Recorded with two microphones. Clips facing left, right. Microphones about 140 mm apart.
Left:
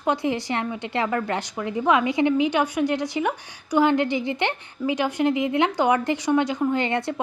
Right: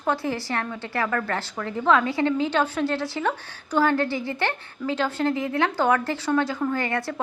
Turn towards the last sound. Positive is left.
turn(degrees=20)  # may be behind; listen again after turning